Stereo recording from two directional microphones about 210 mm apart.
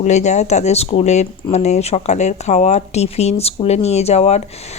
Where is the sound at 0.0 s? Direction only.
35° left (ahead or behind).